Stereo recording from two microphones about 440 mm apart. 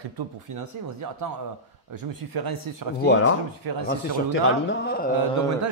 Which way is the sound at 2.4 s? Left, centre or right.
Right.